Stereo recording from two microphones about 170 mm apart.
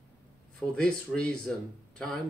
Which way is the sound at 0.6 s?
5° left (ahead or behind).